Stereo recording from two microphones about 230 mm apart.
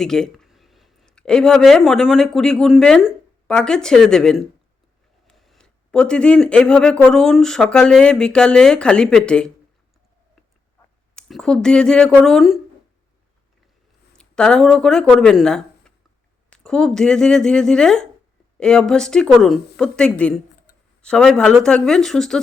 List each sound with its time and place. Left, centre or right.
0.0 s speech: centre
11.1 s speech: centre
14.1 s speech: centre